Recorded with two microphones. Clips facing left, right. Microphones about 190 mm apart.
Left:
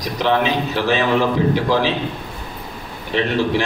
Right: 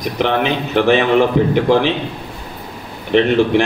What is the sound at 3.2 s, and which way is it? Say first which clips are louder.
Speech: right 6 dB; 60° right (ahead or behind).